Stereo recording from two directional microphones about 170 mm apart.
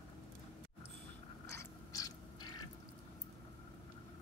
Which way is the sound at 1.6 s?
20° left (ahead or behind).